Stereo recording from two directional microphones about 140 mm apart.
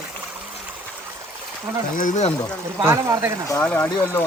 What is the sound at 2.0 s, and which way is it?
Speech, 60° left (ahead or behind).